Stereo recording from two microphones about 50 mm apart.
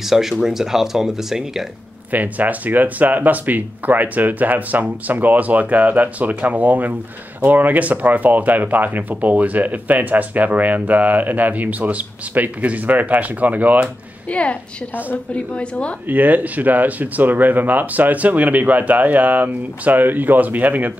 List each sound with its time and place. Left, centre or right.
0.1 s speech: centre
2.1 s speech: right
14.3 s a woman's voice: left
16.1 s speech: right